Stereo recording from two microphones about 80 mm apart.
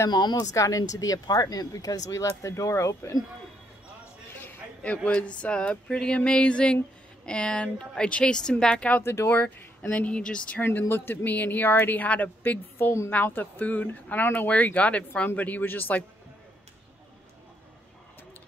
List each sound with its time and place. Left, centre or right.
0.1 s speech: left
4.3 s a sound: left
5.4 s a woman's voice: centre
9.0 s speech: left
9.4 s a woman's voice: centre
10.6 s speech: left